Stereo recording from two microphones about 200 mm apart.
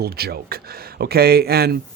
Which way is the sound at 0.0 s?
50° right (ahead or behind).